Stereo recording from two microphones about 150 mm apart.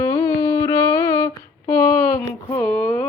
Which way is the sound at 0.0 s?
20° left (ahead or behind).